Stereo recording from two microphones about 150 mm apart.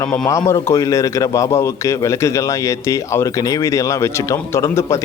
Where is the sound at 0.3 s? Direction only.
20° left (ahead or behind).